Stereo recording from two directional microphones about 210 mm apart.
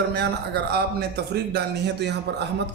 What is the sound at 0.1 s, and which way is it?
A man's voice, 50° right (ahead or behind).